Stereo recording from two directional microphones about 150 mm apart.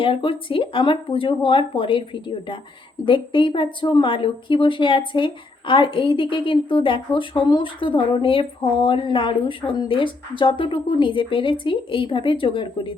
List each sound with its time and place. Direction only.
0.0 s a woman's voice: 35° left (ahead or behind)